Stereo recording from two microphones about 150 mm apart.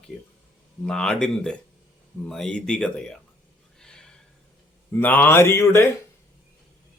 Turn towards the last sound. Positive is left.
turn(degrees=15)  # may be behind; listen again after turning